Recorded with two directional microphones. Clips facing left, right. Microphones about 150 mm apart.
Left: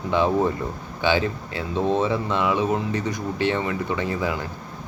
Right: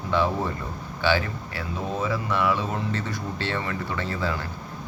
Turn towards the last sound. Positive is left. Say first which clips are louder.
# left 3 dB
turn(degrees=15)  # may be behind; listen again after turning